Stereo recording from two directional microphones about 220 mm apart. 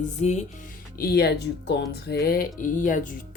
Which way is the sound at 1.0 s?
45° left (ahead or behind).